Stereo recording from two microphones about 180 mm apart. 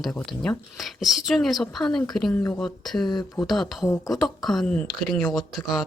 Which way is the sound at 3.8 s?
15° left (ahead or behind).